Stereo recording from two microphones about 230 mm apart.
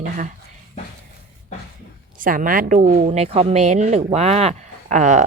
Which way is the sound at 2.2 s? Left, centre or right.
Right.